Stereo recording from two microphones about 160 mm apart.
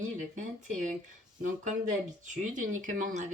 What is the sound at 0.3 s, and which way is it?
Speech, 50° right (ahead or behind).